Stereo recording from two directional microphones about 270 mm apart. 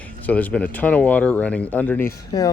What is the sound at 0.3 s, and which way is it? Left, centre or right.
Speech, centre.